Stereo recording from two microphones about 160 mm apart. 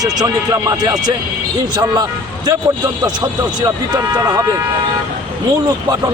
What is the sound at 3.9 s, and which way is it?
Speech, 20° right (ahead or behind).